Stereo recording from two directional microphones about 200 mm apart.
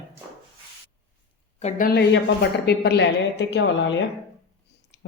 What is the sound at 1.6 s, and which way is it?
A woman's voice, 40° left (ahead or behind).